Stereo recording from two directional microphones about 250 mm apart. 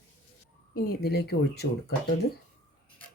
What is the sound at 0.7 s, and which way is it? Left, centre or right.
Speech, left.